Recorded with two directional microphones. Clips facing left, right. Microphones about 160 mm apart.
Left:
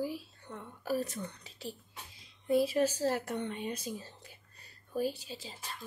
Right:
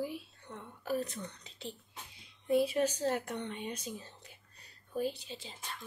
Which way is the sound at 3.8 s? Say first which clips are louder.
Left 3 dB; 5° left (ahead or behind).